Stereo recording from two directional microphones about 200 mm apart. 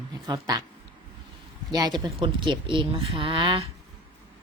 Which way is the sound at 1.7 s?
20° right (ahead or behind).